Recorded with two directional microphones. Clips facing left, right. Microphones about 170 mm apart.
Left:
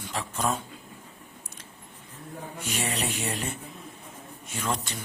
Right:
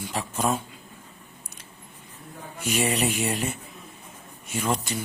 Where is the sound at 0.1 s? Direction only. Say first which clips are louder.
Right 2 dB; 10° right (ahead or behind).